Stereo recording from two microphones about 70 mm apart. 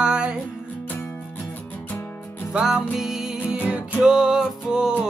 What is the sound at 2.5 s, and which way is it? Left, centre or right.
Music, centre.